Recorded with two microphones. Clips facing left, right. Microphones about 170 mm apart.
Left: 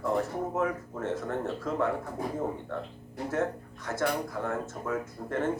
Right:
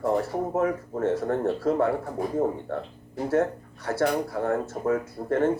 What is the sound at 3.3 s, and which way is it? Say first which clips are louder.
Speech: right 6 dB; 35° right (ahead or behind).